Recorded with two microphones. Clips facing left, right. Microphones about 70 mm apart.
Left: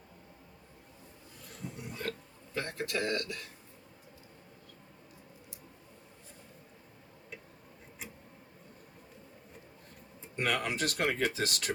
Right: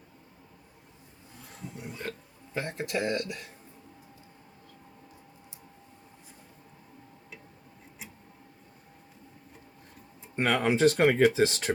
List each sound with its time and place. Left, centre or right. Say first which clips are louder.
1.8 s speech: right 1 dB; right
10.3 s speech: right 7 dB; right